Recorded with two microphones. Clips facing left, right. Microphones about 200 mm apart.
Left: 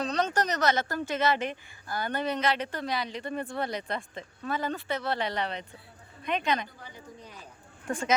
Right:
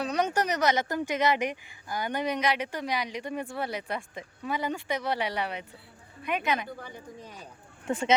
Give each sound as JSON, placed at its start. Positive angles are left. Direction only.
{"t": 0.0, "sound": "speech", "side_deg": -10}
{"t": 7.9, "sound": "speech", "side_deg": -25}